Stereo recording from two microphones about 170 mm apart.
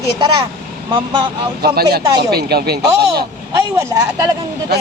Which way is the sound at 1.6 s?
65° right (ahead or behind).